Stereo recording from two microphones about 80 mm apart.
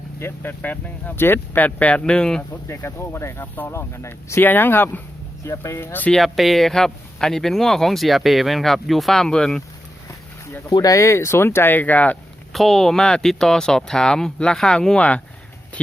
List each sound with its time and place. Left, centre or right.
0.2 s speech: left; by 2.4 s centre
2.6 s speech: left
4.4 s speech: left
6.1 s speech: centre
10.8 s speech: left
12.5 s speech: centre